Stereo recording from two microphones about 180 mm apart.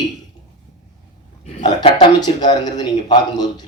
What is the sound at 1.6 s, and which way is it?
A man's voice, 25° left (ahead or behind).